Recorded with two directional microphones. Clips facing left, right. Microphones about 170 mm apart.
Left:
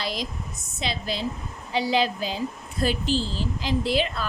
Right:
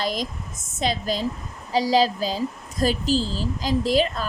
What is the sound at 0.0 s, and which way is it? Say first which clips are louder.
A woman's voice: right 4 dB; 45° right (ahead or behind).